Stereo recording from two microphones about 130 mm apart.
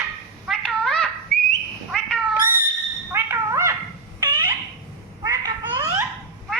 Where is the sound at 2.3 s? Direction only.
15° right (ahead or behind).